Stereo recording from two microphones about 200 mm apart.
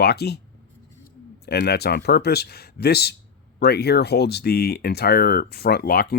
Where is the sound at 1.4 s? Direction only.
55° left (ahead or behind).